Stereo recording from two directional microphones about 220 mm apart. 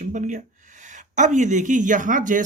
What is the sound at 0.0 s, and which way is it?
Speech, 35° right (ahead or behind).